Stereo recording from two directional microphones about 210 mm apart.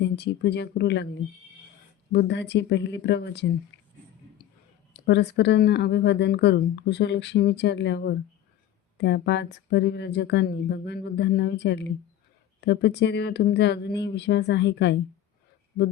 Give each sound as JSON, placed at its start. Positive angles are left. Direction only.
{"t": 0.0, "sound": "speech", "side_deg": 50}
{"t": 2.1, "sound": "a woman's voice", "side_deg": 55}
{"t": 4.9, "sound": "a woman's voice", "side_deg": 55}